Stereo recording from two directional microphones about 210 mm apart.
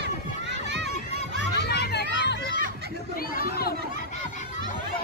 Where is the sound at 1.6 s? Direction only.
50° left (ahead or behind).